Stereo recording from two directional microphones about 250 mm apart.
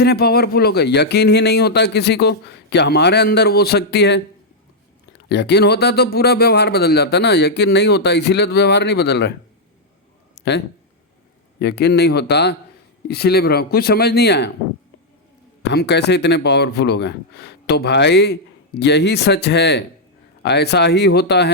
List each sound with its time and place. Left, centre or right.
0.0 s speech: left
5.3 s speech: left
11.6 s speech: left
15.7 s speech: left